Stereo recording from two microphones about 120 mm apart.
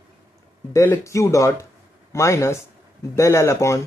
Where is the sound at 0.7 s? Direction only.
25° left (ahead or behind).